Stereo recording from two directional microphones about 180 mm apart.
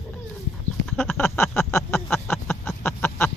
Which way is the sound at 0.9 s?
5° left (ahead or behind).